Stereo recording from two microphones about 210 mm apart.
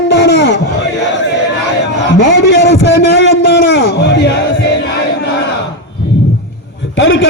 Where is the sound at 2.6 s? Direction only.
55° left (ahead or behind).